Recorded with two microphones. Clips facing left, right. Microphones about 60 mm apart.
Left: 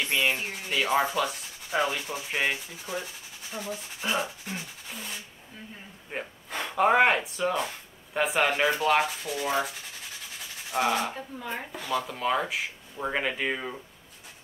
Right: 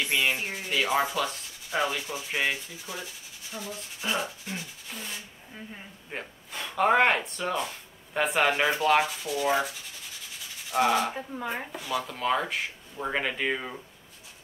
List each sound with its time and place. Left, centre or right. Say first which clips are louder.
0.0 s a sound: even; centre
0.7 s speech: left 1 dB; centre
1.0 s sanding: left 1 dB; centre
2.3 s speech: even; centre
3.5 s speech: left 2 dB; centre
4.0 s speech: left 1 dB; centre
10.7 s speech: right 2 dB; centre